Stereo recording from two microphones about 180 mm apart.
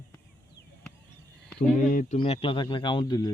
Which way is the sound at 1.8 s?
45° left (ahead or behind).